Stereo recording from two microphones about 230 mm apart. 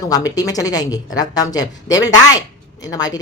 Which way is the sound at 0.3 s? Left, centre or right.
Centre.